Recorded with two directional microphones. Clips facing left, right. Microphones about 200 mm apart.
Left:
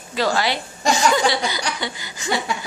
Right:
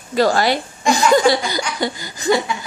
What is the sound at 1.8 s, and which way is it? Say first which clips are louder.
Laughter: right 8 dB; 40° right (ahead or behind).